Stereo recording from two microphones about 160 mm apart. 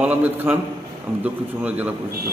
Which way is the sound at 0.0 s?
10° right (ahead or behind).